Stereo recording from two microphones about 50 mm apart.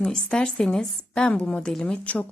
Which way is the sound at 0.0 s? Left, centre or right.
Centre.